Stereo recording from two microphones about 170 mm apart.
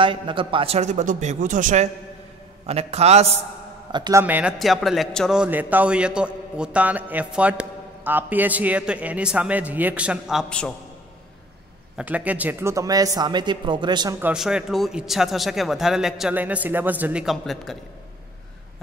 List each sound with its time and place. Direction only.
0.0 s a man's voice: 30° right (ahead or behind); by 1.9 s 50° right (ahead or behind)
2.6 s a man's voice: 35° right (ahead or behind)
3.9 s a man's voice: 25° right (ahead or behind)
4.2 s a man's voice: 10° right (ahead or behind)
12.0 s speech: 10° right (ahead or behind); by 14.1 s 25° right (ahead or behind)
14.2 s a man's voice: 5° right (ahead or behind)